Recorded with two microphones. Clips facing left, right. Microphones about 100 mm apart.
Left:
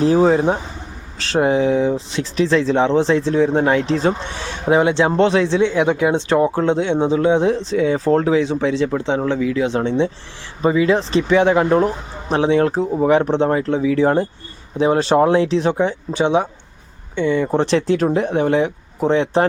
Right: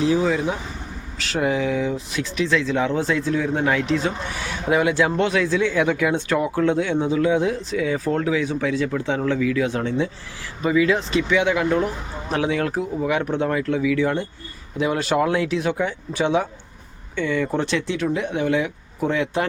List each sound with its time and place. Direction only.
0.0 s speech: 40° left (ahead or behind)